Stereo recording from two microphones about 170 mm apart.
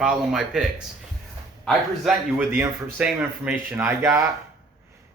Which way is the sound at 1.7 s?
5° right (ahead or behind).